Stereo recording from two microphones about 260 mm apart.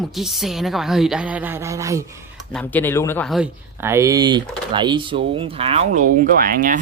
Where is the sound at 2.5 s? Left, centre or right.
Centre.